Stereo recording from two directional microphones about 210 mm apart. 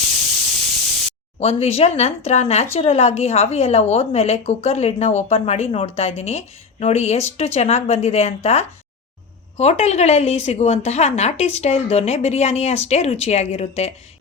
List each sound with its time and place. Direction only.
1.4 s a woman's voice: 30° left (ahead or behind)